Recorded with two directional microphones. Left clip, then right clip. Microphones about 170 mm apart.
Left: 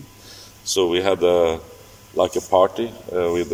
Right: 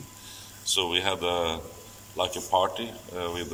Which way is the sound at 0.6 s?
35° left (ahead or behind).